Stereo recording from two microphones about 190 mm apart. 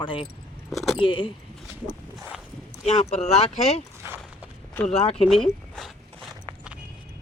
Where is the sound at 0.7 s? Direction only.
Centre (ahead or behind).